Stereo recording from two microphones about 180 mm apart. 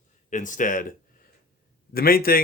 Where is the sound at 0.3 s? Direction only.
45° left (ahead or behind).